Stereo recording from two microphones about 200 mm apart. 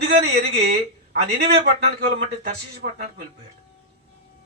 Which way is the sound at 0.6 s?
55° right (ahead or behind).